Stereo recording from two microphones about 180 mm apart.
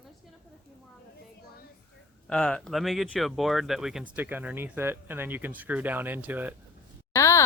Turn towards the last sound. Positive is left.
turn(degrees=15)  # may be behind; listen again after turning